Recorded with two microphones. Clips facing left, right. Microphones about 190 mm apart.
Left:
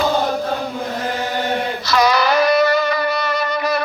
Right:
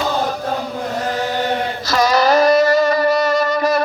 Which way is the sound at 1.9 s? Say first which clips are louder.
Right 2 dB; 45° right (ahead or behind).